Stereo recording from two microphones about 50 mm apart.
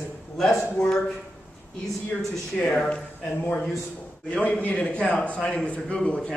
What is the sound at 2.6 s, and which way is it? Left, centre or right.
Speech, centre.